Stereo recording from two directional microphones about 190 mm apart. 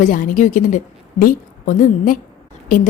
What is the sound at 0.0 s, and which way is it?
A woman's voice, 45° left (ahead or behind).